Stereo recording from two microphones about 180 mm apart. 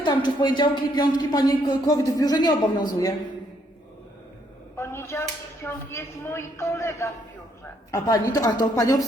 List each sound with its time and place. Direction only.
0.0 s speech: 25° left (ahead or behind)
4.8 s a woman's voice: 15° left (ahead or behind)